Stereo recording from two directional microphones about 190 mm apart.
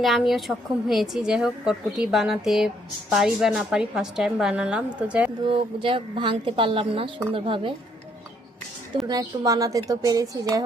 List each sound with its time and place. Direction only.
0.0 s a woman's voice: centre (ahead or behind)
5.5 s a woman's voice: 30° right (ahead or behind)
9.0 s speech: 20° right (ahead or behind)